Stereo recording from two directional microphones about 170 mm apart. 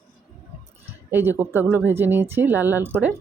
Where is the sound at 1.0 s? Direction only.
10° right (ahead or behind).